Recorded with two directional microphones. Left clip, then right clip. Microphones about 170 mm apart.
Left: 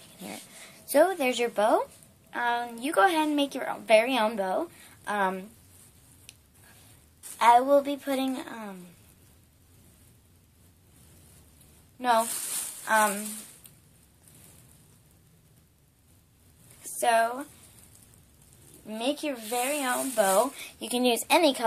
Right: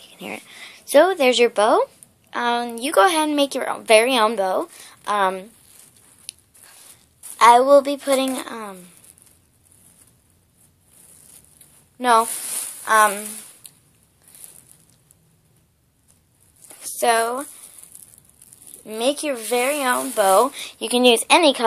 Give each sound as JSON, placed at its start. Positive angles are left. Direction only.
{"t": 0.3, "sound": "a woman's voice", "side_deg": -30}
{"t": 7.3, "sound": "a woman's voice", "side_deg": -35}
{"t": 12.8, "sound": "a woman's voice", "side_deg": -40}
{"t": 16.8, "sound": "speech", "side_deg": -35}
{"t": 18.9, "sound": "a woman's voice", "side_deg": -40}
{"t": 20.9, "sound": "speech", "side_deg": -20}